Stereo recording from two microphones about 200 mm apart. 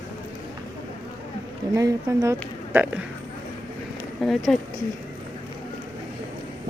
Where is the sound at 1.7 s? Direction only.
15° right (ahead or behind).